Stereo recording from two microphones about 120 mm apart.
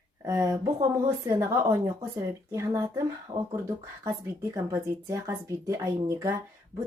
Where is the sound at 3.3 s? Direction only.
65° right (ahead or behind).